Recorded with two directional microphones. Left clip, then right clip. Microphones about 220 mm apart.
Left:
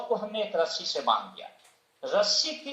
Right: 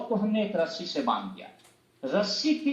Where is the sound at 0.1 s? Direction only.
35° left (ahead or behind).